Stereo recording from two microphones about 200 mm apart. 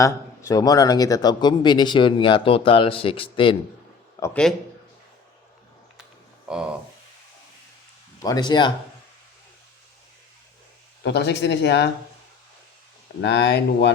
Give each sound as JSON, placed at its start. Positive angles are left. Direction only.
{"t": 0.0, "sound": "speech", "side_deg": 15}
{"t": 4.2, "sound": "speech", "side_deg": 5}
{"t": 6.5, "sound": "speech", "side_deg": -5}
{"t": 8.2, "sound": "speech", "side_deg": 20}
{"t": 11.0, "sound": "speech", "side_deg": 60}
{"t": 13.2, "sound": "speech", "side_deg": 55}